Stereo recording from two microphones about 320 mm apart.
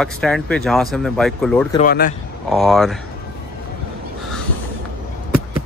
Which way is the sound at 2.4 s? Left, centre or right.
Centre.